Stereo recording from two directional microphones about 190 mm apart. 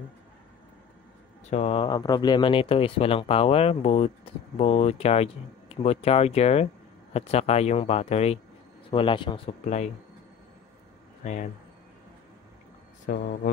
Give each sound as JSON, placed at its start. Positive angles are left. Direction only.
{"t": 1.5, "sound": "a man's voice", "side_deg": 35}
{"t": 13.0, "sound": "speech", "side_deg": 55}